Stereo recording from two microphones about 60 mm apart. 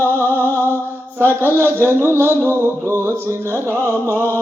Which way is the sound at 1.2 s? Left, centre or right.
Left.